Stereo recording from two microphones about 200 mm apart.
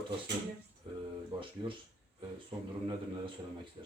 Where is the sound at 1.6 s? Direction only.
25° right (ahead or behind).